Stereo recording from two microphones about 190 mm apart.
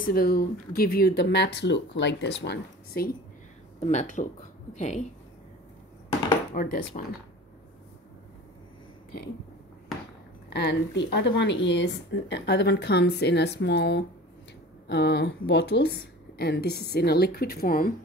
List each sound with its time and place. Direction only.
0.0 s speech: 50° left (ahead or behind)
3.8 s speech: 40° left (ahead or behind)
6.5 s speech: 50° left (ahead or behind)
10.5 s speech: 60° left (ahead or behind)